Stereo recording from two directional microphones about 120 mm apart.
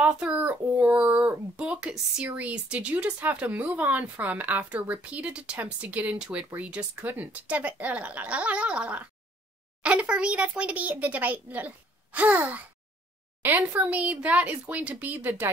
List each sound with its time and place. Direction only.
0.0 s a child's voice: 10° right (ahead or behind)